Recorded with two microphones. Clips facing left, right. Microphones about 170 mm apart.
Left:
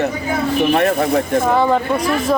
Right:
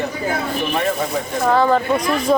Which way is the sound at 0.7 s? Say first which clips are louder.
Left 4 dB; 60° left (ahead or behind).